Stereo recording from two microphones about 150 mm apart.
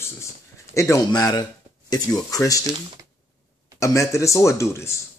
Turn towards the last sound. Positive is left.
turn(degrees=20)  # may be behind; listen again after turning